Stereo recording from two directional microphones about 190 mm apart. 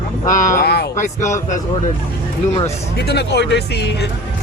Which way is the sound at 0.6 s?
55° left (ahead or behind).